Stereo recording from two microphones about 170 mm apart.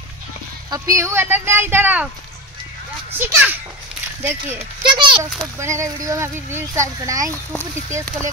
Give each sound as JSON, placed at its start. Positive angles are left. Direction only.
{"t": 0.7, "sound": "speech", "side_deg": -20}
{"t": 3.2, "sound": "speech", "side_deg": -10}
{"t": 4.8, "sound": "a child's voice", "side_deg": -30}
{"t": 5.6, "sound": "speech", "side_deg": -15}